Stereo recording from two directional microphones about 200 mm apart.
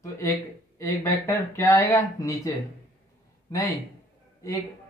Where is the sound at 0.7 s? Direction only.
15° left (ahead or behind).